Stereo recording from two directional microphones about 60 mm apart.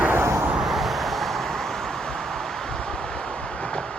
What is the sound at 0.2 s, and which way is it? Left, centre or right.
Vehicle, right.